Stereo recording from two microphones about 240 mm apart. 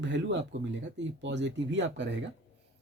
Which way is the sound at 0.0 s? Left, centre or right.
Right.